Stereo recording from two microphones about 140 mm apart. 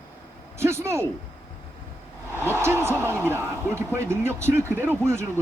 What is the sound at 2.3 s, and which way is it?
Speech, 20° right (ahead or behind).